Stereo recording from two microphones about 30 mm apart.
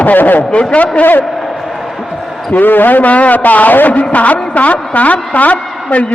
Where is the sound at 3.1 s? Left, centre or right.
Left.